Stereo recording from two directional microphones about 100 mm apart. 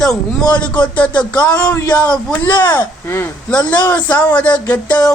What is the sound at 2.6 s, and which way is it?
Speech, 45° left (ahead or behind).